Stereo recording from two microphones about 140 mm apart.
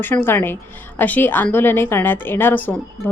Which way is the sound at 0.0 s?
15° left (ahead or behind).